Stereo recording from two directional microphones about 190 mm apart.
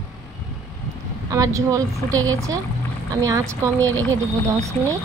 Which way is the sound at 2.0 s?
90° right.